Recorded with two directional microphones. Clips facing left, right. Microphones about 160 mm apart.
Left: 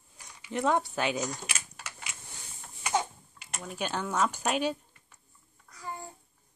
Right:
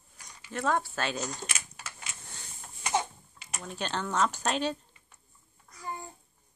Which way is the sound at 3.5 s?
5° left (ahead or behind).